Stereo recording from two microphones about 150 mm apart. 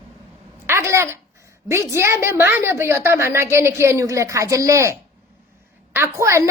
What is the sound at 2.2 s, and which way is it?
A woman's voice, 15° right (ahead or behind).